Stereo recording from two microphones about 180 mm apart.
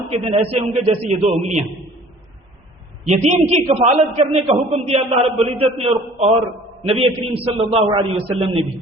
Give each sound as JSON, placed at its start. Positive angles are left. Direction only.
{"t": 0.1, "sound": "a man's voice", "side_deg": -35}
{"t": 3.2, "sound": "a man's voice", "side_deg": -35}